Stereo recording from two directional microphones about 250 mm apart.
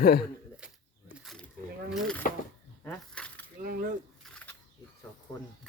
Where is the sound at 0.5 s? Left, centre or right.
Centre.